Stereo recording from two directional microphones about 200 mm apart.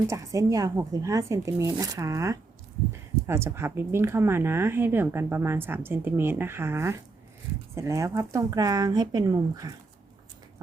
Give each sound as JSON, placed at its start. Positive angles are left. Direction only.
{"t": 0.1, "sound": "speech", "side_deg": -15}